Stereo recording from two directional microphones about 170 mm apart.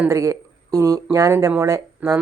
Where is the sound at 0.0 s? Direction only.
20° right (ahead or behind).